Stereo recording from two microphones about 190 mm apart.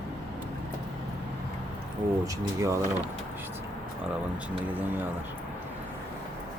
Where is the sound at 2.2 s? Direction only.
15° right (ahead or behind).